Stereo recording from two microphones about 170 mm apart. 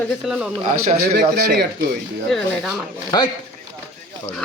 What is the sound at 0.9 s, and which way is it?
Speech, 65° right (ahead or behind).